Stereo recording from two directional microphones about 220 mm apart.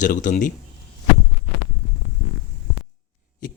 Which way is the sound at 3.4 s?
40° left (ahead or behind).